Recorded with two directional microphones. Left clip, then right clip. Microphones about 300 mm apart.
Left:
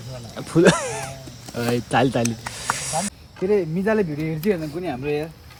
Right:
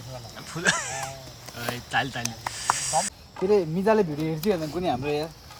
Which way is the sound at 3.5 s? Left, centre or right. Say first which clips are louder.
Left 1 dB; centre.